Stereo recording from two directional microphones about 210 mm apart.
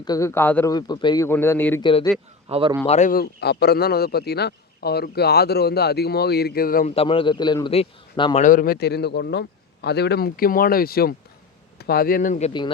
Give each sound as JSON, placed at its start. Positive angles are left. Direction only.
{"t": 0.0, "sound": "a man's voice", "side_deg": 15}
{"t": 1.8, "sound": "a man's voice", "side_deg": 25}
{"t": 2.5, "sound": "a man's voice", "side_deg": -25}
{"t": 2.8, "sound": "speech", "side_deg": 35}
{"t": 6.9, "sound": "a man's voice", "side_deg": 25}
{"t": 8.4, "sound": "speech", "side_deg": 40}